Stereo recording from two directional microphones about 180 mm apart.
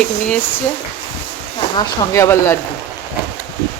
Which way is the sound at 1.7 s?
20° left (ahead or behind).